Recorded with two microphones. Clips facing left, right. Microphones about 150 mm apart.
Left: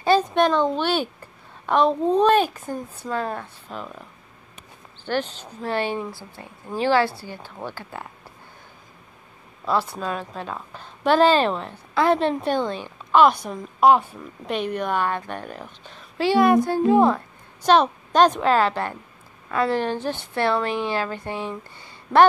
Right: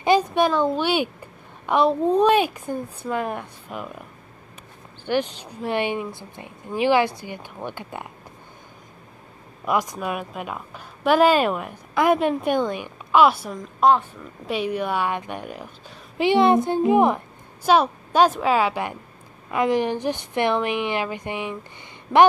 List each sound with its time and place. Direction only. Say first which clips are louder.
0.0 s a woman's voice: even; 15° right (ahead or behind)
5.0 s a woman's voice: right 2 dB; 15° right (ahead or behind)
9.7 s a woman's voice: even; 15° right (ahead or behind)
13.7 s a woman's voice: left 2 dB; 5° left (ahead or behind)
14.4 s a woman's voice: right 1 dB; 10° right (ahead or behind)